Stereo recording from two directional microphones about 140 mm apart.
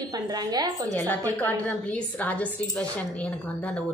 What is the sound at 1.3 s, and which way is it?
Speech, 15° left (ahead or behind).